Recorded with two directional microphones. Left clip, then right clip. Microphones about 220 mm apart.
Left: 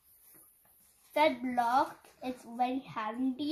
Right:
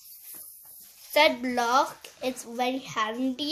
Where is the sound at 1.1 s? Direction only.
35° right (ahead or behind).